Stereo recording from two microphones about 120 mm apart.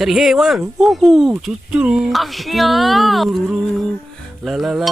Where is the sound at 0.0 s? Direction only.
5° right (ahead or behind).